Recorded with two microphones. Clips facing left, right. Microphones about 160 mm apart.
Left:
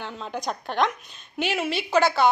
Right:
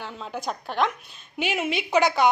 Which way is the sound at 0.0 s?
5° right (ahead or behind).